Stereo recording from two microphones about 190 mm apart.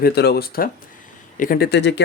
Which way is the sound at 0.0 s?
55° left (ahead or behind).